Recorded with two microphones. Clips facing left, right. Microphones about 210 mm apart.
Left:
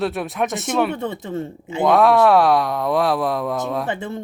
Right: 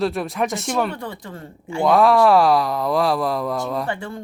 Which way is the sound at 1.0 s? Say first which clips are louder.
Left 7 dB; 20° left (ahead or behind).